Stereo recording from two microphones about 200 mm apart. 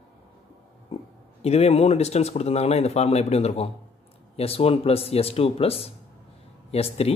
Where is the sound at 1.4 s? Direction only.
30° left (ahead or behind).